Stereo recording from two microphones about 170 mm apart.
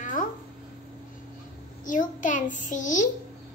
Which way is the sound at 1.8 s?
50° left (ahead or behind).